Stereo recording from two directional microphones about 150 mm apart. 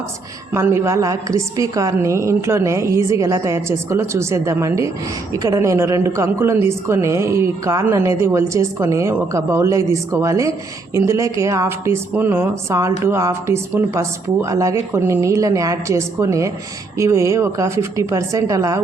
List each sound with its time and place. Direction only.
0.5 s a woman's voice: 20° right (ahead or behind)